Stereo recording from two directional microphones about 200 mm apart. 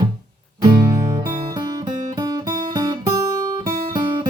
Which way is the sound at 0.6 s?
20° right (ahead or behind).